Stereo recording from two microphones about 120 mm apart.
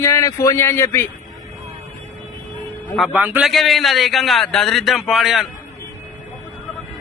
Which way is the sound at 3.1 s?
15° right (ahead or behind).